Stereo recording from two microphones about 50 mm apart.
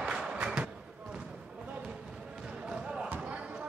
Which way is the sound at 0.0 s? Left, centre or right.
Centre.